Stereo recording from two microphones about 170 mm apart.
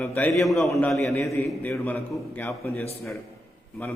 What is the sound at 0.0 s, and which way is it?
A man's voice, 10° left (ahead or behind).